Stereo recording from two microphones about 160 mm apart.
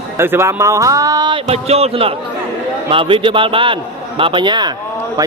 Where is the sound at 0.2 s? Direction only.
15° right (ahead or behind).